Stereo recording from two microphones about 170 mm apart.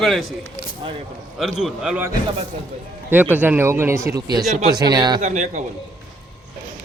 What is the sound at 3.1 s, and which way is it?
A man's voice, 10° right (ahead or behind).